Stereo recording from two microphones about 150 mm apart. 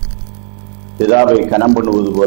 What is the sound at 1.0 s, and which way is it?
A man's voice, 20° right (ahead or behind).